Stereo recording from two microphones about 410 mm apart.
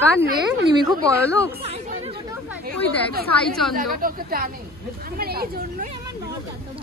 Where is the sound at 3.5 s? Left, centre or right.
Centre.